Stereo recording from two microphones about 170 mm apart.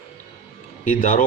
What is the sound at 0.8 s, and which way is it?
Speech, 50° left (ahead or behind).